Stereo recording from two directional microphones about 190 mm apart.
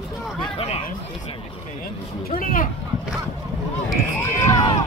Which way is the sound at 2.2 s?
45° left (ahead or behind).